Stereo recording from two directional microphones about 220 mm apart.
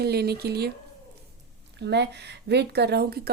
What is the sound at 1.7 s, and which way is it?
Speech, 50° right (ahead or behind).